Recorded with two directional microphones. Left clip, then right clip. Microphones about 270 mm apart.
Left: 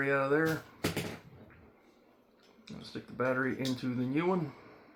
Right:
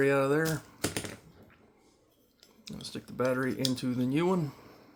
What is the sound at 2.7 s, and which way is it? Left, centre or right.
Speech, right.